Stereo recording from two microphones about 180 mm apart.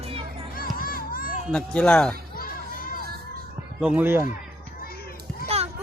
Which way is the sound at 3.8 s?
5° right (ahead or behind).